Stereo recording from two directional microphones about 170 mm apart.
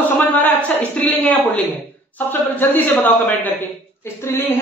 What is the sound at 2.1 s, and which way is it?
A man's voice, 10° left (ahead or behind).